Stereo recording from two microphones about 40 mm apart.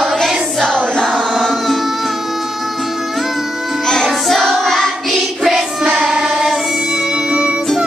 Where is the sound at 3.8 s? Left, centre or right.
Centre.